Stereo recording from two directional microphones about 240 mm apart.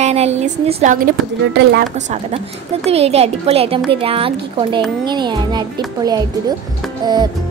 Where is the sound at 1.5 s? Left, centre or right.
Right.